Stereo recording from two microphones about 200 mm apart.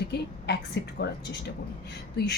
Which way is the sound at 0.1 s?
55° left (ahead or behind).